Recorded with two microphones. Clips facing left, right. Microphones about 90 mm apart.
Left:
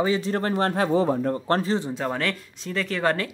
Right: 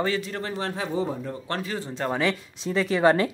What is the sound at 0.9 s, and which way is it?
Speech, 70° left (ahead or behind).